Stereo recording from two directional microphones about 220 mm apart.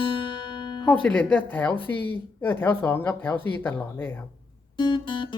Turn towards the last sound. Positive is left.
turn(degrees=20)  # may be behind; listen again after turning